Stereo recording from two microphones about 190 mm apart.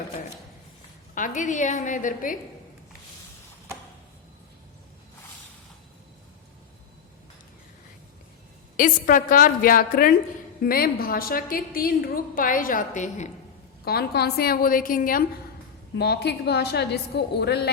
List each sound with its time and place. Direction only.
1.1 s a woman's voice: 40° left (ahead or behind)
8.7 s a woman's voice: 45° left (ahead or behind)
13.8 s a woman's voice: 55° left (ahead or behind)
16.0 s a woman's voice: 60° left (ahead or behind)